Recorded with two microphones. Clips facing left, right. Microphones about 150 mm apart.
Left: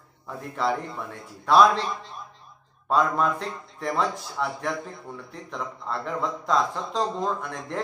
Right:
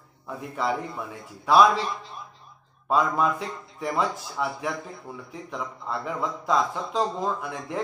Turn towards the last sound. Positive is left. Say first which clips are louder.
# even
turn(degrees=-5)  # may be behind; listen again after turning